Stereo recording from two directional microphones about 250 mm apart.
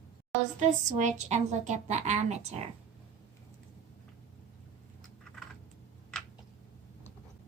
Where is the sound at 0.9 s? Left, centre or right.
Right.